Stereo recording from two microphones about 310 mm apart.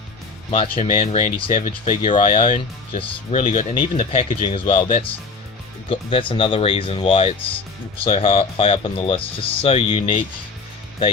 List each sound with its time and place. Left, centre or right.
0.7 s speech: left